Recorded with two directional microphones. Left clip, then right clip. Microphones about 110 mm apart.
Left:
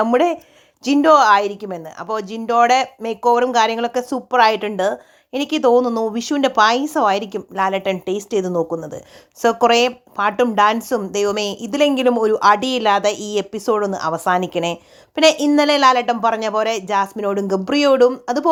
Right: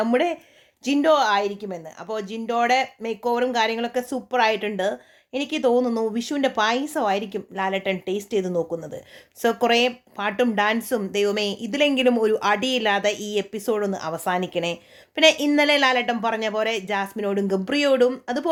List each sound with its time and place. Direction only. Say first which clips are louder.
0.0 s speech: left 6 dB; 25° left (ahead or behind)